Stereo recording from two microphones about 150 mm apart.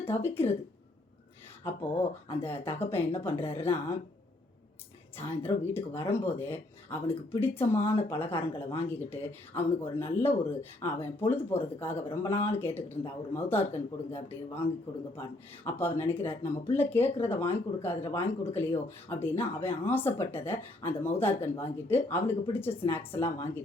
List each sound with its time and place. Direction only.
0.1 s speech: 15° left (ahead or behind)
2.3 s speech: 15° left (ahead or behind)
5.1 s speech: 15° left (ahead or behind)